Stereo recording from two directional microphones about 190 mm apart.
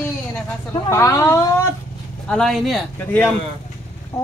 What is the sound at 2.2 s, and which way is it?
A man's voice, 5° left (ahead or behind).